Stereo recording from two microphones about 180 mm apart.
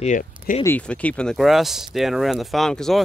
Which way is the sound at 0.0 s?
45° left (ahead or behind).